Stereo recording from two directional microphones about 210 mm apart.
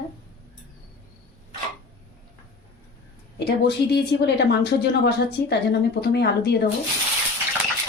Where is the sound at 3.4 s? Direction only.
50° left (ahead or behind).